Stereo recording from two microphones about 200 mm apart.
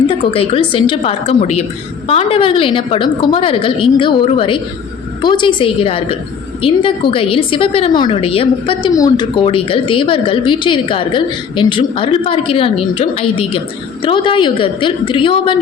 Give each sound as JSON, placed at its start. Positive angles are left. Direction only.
{"t": 0.3, "sound": "a woman's voice", "side_deg": 30}